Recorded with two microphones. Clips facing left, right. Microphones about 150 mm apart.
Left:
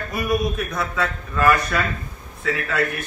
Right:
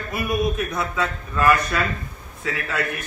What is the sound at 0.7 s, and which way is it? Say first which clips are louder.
Speech: even; 5° right (ahead or behind).